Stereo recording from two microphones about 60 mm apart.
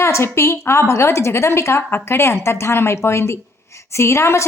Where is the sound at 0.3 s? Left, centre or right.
Left.